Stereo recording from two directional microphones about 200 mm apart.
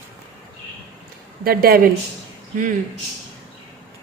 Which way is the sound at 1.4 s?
50° right (ahead or behind).